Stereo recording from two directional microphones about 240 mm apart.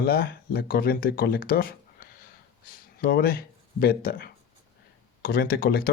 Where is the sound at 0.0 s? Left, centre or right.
Left.